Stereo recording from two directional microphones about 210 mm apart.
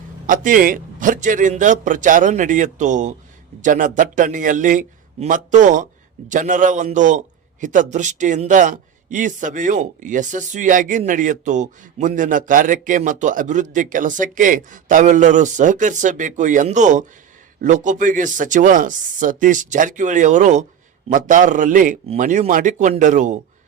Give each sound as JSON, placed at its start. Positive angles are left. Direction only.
{"t": 0.3, "sound": "speech", "side_deg": -40}